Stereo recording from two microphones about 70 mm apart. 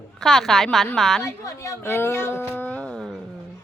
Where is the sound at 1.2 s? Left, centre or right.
Left.